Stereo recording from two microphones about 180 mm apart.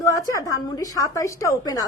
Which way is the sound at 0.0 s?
20° left (ahead or behind).